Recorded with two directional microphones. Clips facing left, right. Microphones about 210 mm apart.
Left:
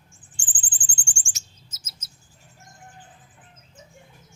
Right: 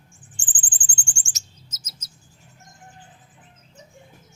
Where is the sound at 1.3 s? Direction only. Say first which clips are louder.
Right 2 dB; 40° right (ahead or behind).